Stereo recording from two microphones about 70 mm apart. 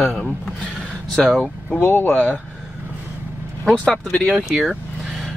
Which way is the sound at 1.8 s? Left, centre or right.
Left.